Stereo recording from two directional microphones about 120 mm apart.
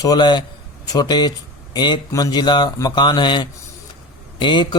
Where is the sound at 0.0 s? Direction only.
35° left (ahead or behind).